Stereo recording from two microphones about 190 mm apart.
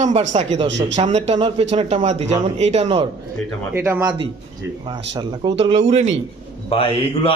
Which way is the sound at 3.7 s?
15° right (ahead or behind).